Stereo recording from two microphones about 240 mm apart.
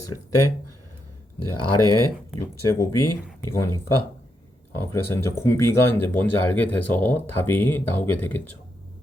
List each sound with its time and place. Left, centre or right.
0.3 s speech: left
3.5 s speech: centre